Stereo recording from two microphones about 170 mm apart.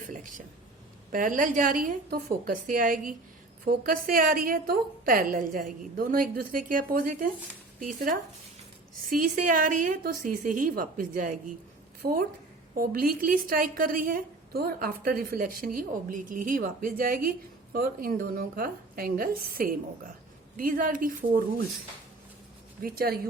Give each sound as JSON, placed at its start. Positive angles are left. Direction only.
{"t": 0.0, "sound": "a sound", "side_deg": -50}
{"t": 1.1, "sound": "a woman's voice", "side_deg": -50}
{"t": 22.8, "sound": "a woman's voice", "side_deg": -60}